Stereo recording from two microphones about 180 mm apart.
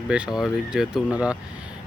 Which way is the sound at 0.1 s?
5° right (ahead or behind).